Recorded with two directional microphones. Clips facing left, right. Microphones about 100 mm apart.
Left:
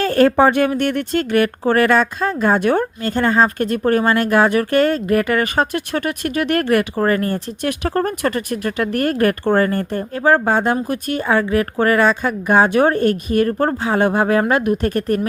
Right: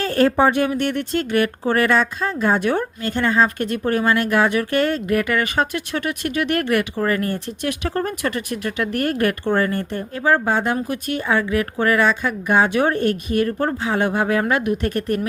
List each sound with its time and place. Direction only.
0.0 s speech: 55° left (ahead or behind)
3.1 s speech: 40° left (ahead or behind)